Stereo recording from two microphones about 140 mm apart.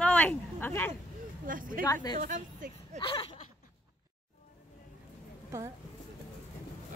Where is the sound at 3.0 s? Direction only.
40° left (ahead or behind).